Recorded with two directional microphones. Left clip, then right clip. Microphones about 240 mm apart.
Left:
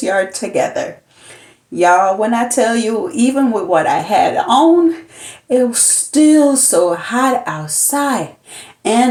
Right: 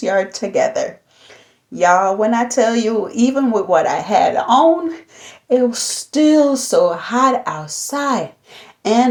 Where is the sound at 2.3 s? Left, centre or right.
Right.